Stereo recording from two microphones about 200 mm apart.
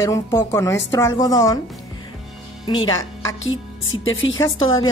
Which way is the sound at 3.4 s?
80° left.